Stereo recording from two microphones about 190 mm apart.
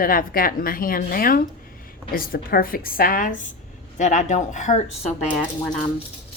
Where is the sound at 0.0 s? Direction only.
50° left (ahead or behind).